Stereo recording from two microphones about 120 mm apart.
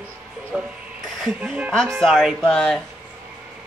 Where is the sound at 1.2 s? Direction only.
10° right (ahead or behind).